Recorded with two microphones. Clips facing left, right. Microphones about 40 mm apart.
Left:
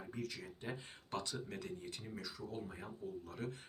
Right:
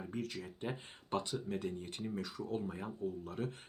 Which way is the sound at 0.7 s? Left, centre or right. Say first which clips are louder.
Right 5 dB; right.